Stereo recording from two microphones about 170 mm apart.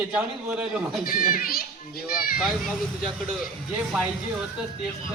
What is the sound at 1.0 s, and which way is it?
Speech, 60° left (ahead or behind).